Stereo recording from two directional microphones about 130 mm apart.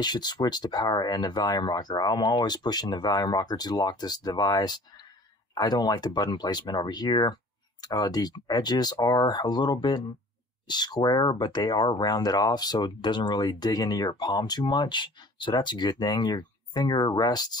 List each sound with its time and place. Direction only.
0.0 s speech: 35° left (ahead or behind)